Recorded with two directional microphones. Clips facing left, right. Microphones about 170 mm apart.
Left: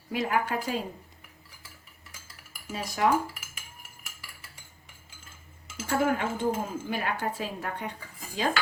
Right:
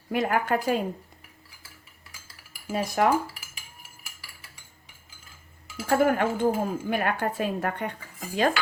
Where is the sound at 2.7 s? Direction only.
55° right (ahead or behind).